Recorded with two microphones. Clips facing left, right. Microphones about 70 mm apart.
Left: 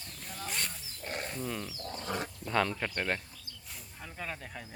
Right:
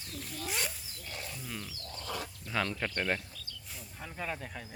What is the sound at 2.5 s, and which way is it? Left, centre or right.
Speech, centre.